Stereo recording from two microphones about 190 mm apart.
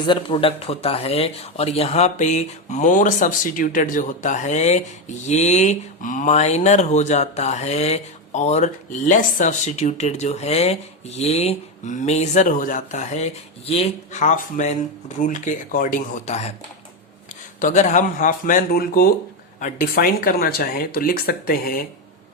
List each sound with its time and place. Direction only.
0.0 s speech: 25° left (ahead or behind)
17.6 s speech: 40° left (ahead or behind)